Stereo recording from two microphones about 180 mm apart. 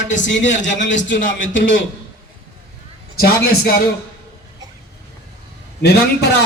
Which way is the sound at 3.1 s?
60° left (ahead or behind).